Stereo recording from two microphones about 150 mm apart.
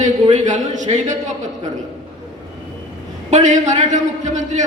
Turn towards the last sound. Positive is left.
turn(degrees=-55)  # may be behind; listen again after turning